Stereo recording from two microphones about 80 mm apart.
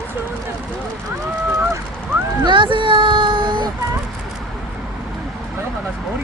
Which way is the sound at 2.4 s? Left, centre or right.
Right.